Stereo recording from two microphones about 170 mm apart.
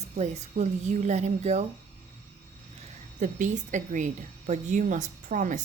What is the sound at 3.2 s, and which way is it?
A woman's voice, 45° right (ahead or behind).